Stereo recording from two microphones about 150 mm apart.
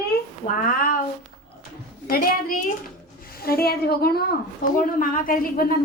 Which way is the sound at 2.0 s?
75° left (ahead or behind).